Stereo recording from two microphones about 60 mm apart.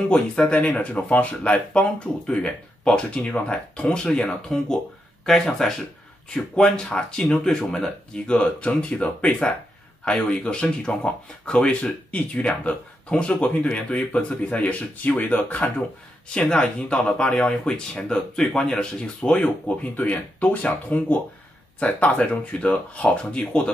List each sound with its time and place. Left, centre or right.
0.1 s speech: left
5.2 s speech: centre; by 15.7 s left
16.3 s speech: centre